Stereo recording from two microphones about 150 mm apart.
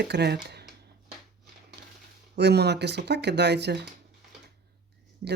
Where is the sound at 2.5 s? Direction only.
90° right.